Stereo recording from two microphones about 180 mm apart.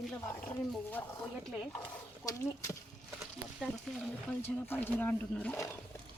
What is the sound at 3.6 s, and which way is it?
Speech, centre (ahead or behind).